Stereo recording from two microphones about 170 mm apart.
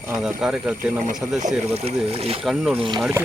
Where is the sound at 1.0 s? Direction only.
45° right (ahead or behind).